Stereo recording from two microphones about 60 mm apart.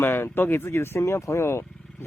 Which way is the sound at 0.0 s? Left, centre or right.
Left.